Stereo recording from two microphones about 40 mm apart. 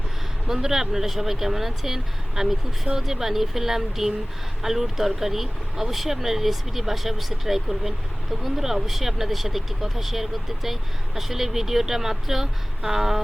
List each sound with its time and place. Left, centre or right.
0.4 s speech: centre